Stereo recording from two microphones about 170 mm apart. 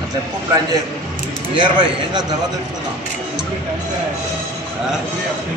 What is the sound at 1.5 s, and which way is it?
Speech, 25° right (ahead or behind).